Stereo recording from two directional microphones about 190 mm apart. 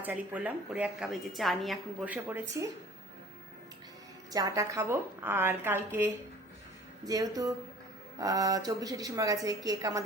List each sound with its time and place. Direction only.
0.0 s a woman's voice: 10° right (ahead or behind)
4.3 s a woman's voice: 20° right (ahead or behind)